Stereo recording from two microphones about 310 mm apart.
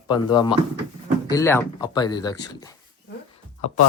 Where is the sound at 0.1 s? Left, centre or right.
Centre.